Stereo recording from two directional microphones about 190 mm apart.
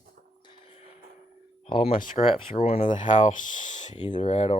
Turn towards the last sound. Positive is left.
turn(degrees=30)  # may be behind; listen again after turning